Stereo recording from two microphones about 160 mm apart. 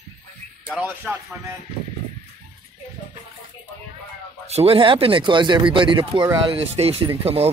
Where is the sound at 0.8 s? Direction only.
10° right (ahead or behind).